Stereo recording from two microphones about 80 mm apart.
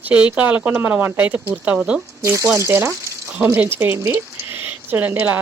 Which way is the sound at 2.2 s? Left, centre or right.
Right.